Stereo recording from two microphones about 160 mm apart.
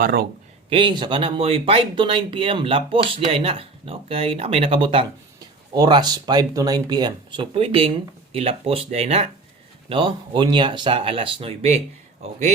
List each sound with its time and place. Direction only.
0.0 s speech: 70° right (ahead or behind)
0.7 s speech: 30° right (ahead or behind)
9.9 s speech: 30° right (ahead or behind); by 12.5 s 45° right (ahead or behind)